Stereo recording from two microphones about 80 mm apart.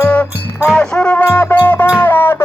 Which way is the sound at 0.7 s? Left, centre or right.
Centre.